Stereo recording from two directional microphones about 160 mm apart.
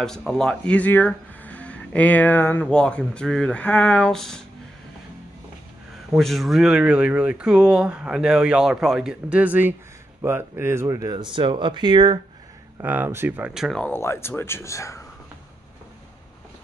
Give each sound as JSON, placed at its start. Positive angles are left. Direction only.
{"t": 0.0, "sound": "speech", "side_deg": 5}
{"t": 6.1, "sound": "speech", "side_deg": 0}
{"t": 12.8, "sound": "speech", "side_deg": -10}
{"t": 13.5, "sound": "speech", "side_deg": 0}